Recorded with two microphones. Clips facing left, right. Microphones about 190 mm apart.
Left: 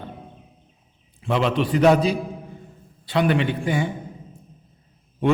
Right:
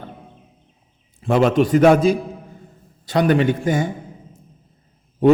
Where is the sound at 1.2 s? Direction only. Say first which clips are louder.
Right 6 dB; 45° right (ahead or behind).